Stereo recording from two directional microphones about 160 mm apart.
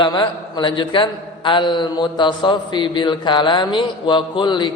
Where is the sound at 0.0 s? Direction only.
25° left (ahead or behind).